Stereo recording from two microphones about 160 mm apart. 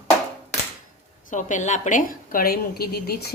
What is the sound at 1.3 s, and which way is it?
A woman's voice, 50° left (ahead or behind).